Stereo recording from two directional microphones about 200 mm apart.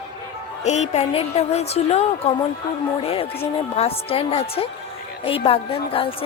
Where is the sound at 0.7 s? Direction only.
35° left (ahead or behind).